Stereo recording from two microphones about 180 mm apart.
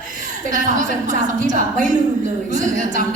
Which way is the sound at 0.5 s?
45° right (ahead or behind).